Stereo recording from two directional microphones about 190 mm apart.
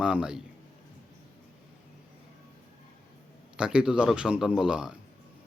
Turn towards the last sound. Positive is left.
turn(degrees=-5)  # may be behind; listen again after turning